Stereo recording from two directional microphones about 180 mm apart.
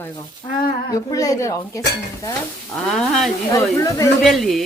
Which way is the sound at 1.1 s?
20° left (ahead or behind).